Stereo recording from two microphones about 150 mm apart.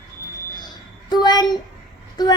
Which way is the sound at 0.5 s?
25° left (ahead or behind).